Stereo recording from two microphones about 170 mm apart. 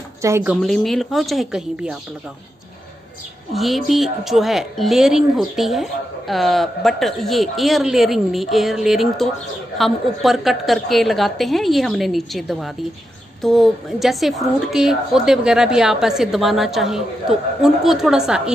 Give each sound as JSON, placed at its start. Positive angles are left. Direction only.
{"t": 0.2, "sound": "a woman's voice", "side_deg": -15}
{"t": 0.6, "sound": "a woman's voice", "side_deg": 0}
{"t": 3.5, "sound": "a woman's voice", "side_deg": 0}